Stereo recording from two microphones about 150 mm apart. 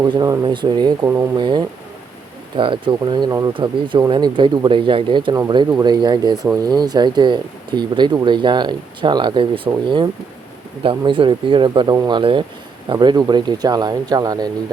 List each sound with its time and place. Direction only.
0.0 s speech: 25° right (ahead or behind)
1.4 s speech: 30° right (ahead or behind)
10.8 s speech: 35° right (ahead or behind)